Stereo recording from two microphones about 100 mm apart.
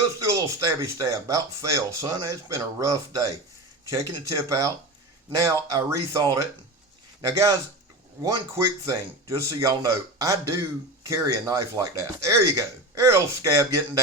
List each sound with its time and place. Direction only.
0.2 s speech: 30° right (ahead or behind)